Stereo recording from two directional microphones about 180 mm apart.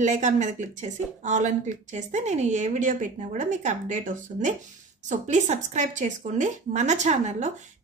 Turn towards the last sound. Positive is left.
turn(degrees=-40)  # may be behind; listen again after turning